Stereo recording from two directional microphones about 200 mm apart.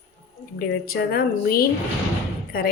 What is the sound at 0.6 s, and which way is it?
A woman's voice, 50° left (ahead or behind).